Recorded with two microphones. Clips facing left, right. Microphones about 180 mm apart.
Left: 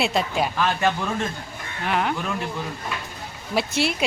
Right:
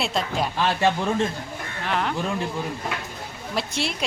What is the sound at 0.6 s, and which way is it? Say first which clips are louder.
Speech: right 2 dB; 30° right (ahead or behind).